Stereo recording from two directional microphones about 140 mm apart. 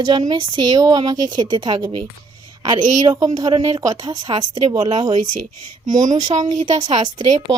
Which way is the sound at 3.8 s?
25° right (ahead or behind).